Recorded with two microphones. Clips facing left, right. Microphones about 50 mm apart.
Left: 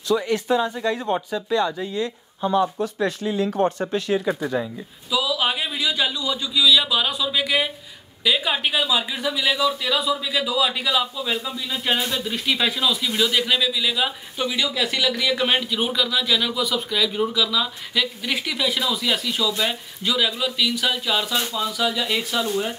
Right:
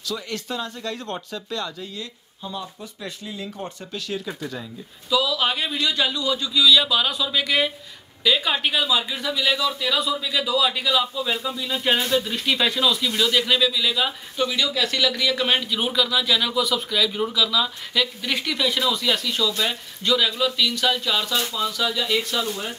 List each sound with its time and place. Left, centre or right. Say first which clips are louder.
0.1 s speech: left 9 dB; centre
2.4 s speech: left 13 dB; left
3.9 s speech: left 8 dB; left
5.1 s speech: right 1 dB; centre